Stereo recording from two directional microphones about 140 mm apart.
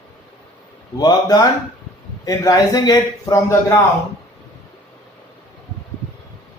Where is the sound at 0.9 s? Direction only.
25° left (ahead or behind).